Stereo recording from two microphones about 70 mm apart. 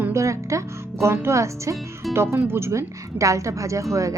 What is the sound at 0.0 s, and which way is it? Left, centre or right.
Music, right.